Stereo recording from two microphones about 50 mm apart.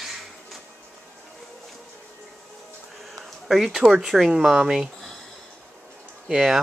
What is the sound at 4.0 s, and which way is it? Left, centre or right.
Speech, centre.